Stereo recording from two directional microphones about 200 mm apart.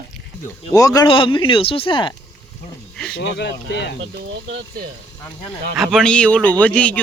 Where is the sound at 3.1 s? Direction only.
55° left (ahead or behind).